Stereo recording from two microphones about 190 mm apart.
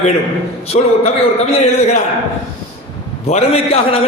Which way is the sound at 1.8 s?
35° left (ahead or behind).